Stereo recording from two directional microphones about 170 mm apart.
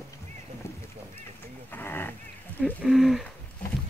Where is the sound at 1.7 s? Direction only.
10° left (ahead or behind).